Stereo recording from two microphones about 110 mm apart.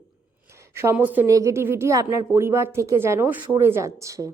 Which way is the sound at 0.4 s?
25° right (ahead or behind).